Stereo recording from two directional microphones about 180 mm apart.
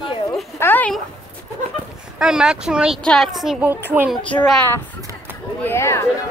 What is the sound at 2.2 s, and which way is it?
A woman's voice, 5° right (ahead or behind).